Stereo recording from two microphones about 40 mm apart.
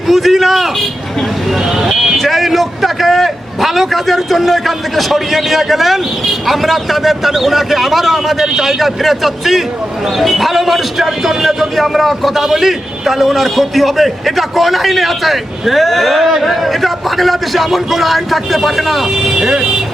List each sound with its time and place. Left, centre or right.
0.1 s a man's voice: centre
1.8 s a man's voice: centre
19.3 s speech: centre